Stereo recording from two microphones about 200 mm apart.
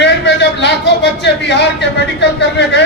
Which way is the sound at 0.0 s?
60° left (ahead or behind).